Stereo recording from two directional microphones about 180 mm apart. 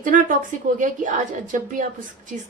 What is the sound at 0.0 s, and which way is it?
A woman's voice, 45° right (ahead or behind).